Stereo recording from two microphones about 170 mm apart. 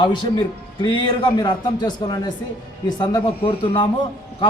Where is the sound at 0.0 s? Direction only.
25° left (ahead or behind).